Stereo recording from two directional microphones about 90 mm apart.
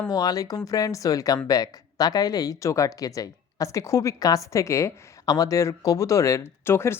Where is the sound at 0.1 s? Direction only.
45° left (ahead or behind).